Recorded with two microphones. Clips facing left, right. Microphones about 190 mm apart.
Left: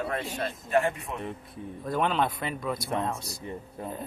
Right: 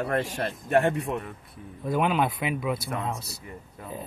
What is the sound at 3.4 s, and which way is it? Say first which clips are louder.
Speech: left 5 dB; 30° left (ahead or behind).